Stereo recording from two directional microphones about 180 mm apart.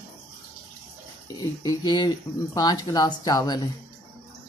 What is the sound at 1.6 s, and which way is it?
Speech, 20° left (ahead or behind).